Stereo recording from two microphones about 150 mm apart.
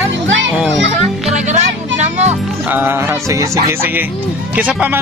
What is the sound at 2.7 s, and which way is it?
Music, 15° right (ahead or behind).